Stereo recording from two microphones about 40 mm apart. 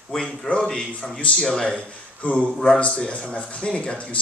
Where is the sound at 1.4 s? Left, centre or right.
Centre.